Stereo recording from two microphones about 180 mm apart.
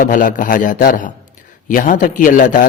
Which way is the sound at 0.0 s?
50° left (ahead or behind).